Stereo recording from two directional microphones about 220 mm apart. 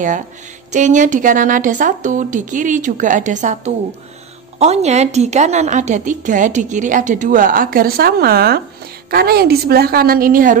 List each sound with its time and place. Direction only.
0.7 s a woman's voice: 35° right (ahead or behind)